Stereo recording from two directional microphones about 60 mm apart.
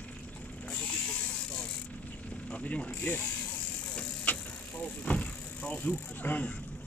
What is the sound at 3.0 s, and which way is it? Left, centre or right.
Speech, left.